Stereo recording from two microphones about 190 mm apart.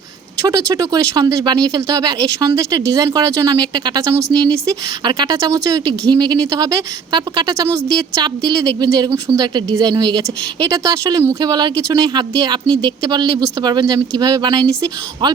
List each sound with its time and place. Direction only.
0.4 s speech: 15° right (ahead or behind)